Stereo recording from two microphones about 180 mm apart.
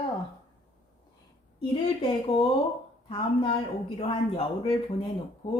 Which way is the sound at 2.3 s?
35° left (ahead or behind).